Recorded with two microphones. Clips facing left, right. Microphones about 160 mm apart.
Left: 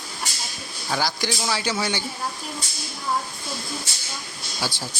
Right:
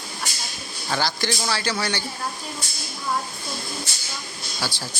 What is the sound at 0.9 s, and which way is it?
Speech, 10° left (ahead or behind).